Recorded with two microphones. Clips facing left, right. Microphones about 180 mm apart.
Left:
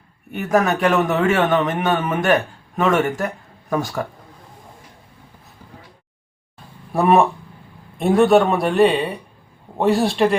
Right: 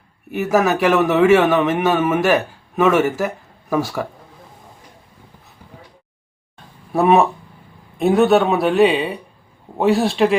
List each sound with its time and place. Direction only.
0.3 s a man's voice: 5° right (ahead or behind)
6.9 s speech: centre (ahead or behind)